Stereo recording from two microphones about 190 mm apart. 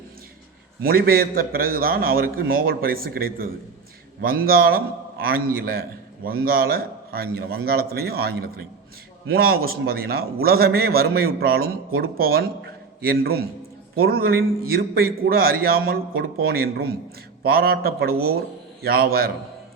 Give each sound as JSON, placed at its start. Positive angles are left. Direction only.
{"t": 0.8, "sound": "a man's voice", "side_deg": -50}